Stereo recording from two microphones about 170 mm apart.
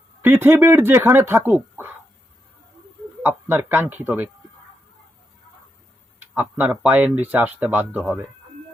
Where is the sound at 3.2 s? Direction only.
15° right (ahead or behind).